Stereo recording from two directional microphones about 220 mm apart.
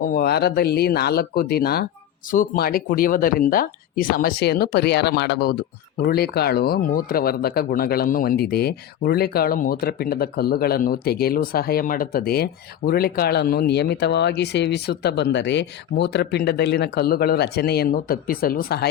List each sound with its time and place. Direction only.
0.0 s speech: 40° left (ahead or behind)